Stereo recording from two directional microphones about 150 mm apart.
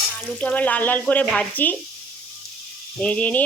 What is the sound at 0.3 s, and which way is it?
Speech, 10° left (ahead or behind).